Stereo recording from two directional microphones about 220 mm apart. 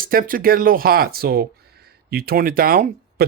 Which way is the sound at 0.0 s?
40° right (ahead or behind).